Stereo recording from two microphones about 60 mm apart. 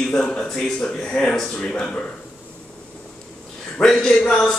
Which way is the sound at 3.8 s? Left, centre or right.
Centre.